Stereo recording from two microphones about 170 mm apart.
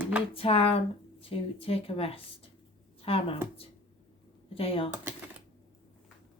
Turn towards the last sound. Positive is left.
turn(degrees=35)  # may be behind; listen again after turning